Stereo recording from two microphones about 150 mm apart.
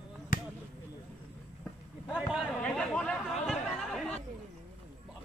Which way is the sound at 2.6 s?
5° left (ahead or behind).